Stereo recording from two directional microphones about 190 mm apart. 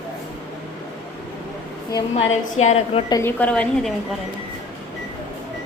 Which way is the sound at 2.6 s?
35° left (ahead or behind).